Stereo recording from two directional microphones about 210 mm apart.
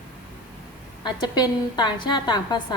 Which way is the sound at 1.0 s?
20° left (ahead or behind).